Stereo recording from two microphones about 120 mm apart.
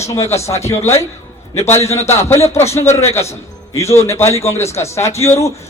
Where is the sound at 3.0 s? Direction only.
60° left (ahead or behind).